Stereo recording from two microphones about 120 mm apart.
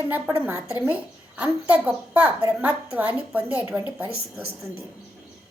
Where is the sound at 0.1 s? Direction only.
20° right (ahead or behind).